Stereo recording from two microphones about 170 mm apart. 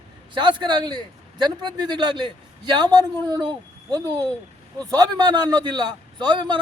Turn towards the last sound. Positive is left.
turn(degrees=-25)  # may be behind; listen again after turning